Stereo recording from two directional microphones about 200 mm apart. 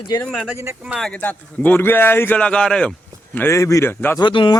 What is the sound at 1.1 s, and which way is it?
Speech, 10° left (ahead or behind).